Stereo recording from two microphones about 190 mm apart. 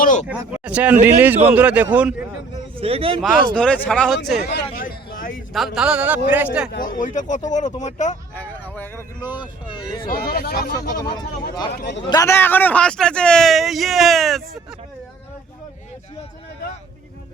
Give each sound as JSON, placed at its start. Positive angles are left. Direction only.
{"t": 0.0, "sound": "speech", "side_deg": 45}
{"t": 0.3, "sound": "speech", "side_deg": -5}
{"t": 2.7, "sound": "speech", "side_deg": -30}
{"t": 3.5, "sound": "speech", "side_deg": 5}
{"t": 4.5, "sound": "a sound", "side_deg": 50}
{"t": 5.5, "sound": "speech", "side_deg": 0}
{"t": 6.7, "sound": "speech", "side_deg": 50}
{"t": 8.4, "sound": "speech", "side_deg": 10}
{"t": 9.6, "sound": "speech", "side_deg": 25}
{"t": 10.1, "sound": "speech", "side_deg": 50}
{"t": 10.9, "sound": "speech", "side_deg": 20}
{"t": 11.8, "sound": "speech", "side_deg": 65}
{"t": 12.0, "sound": "speech", "side_deg": 20}